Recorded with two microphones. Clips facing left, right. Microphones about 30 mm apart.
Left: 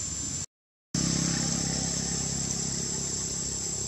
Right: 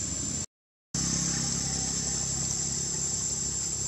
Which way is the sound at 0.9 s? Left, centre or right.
Left.